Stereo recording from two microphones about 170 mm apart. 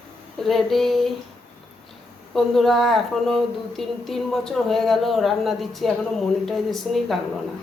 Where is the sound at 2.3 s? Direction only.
Centre (ahead or behind).